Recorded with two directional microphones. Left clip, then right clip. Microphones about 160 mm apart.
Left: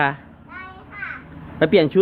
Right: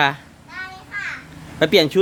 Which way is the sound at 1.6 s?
25° right (ahead or behind).